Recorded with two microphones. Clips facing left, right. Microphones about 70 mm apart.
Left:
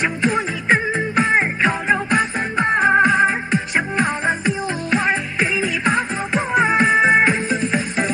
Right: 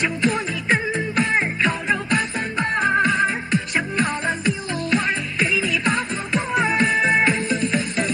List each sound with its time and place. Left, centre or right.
0.0 s music: left